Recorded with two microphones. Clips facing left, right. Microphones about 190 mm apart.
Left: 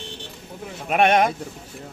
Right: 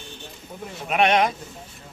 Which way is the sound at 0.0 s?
80° left.